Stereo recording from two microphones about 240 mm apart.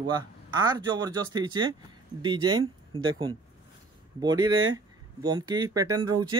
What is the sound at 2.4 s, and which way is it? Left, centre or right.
Speech, right.